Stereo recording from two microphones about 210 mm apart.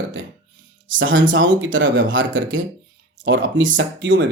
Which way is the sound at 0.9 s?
65° right (ahead or behind).